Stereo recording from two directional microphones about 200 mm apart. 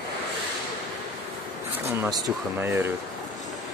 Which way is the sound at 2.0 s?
20° right (ahead or behind).